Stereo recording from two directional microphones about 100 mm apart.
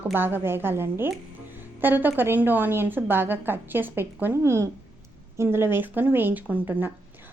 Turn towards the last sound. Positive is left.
turn(degrees=-20)  # may be behind; listen again after turning